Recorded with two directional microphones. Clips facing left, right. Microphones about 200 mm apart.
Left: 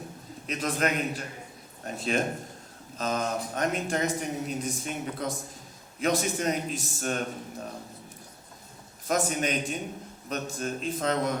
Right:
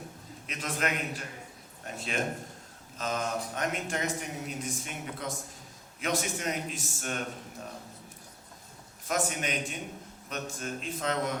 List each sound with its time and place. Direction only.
0.4 s speech: 35° left (ahead or behind)
9.0 s speech: 35° left (ahead or behind)